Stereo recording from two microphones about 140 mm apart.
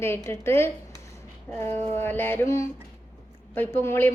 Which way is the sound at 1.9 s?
15° left (ahead or behind).